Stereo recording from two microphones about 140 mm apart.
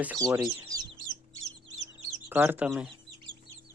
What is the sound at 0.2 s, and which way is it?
Speech, 25° right (ahead or behind).